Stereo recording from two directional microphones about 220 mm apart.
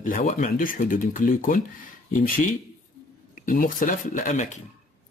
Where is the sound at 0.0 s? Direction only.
35° left (ahead or behind).